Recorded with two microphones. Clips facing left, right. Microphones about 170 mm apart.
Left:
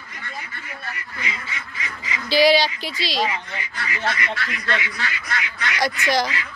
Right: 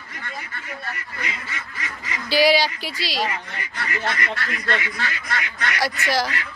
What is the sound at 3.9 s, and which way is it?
Speech, 45° right (ahead or behind).